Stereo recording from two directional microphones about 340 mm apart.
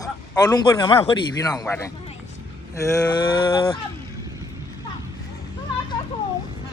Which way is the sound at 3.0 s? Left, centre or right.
Centre.